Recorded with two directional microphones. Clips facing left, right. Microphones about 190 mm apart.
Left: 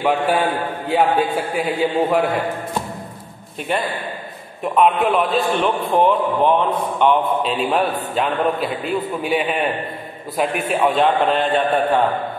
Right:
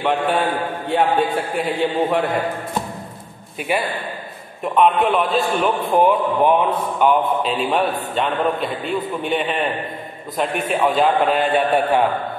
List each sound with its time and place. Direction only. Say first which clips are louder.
0.0 s a man's voice: left 1 dB; centre (ahead or behind)
3.7 s mantra: right 1 dB; 5° right (ahead or behind)
4.7 s a man's voice: even; centre (ahead or behind)
11.5 s mantra: even; 10° right (ahead or behind)